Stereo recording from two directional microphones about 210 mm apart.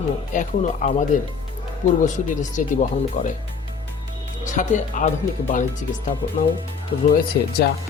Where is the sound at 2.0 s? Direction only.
35° left (ahead or behind).